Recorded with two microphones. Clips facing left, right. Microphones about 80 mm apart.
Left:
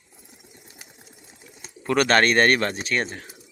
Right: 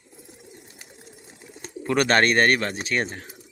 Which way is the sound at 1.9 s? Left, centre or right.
Centre.